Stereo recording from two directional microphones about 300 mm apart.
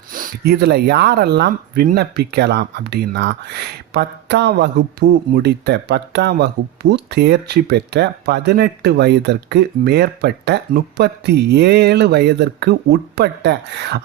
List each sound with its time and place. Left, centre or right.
0.1 s speech: right